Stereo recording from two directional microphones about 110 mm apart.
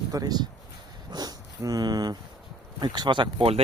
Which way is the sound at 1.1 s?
40° right (ahead or behind).